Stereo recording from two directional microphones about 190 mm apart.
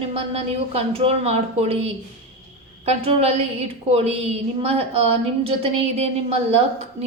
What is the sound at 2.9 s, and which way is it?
A woman's voice, 30° right (ahead or behind).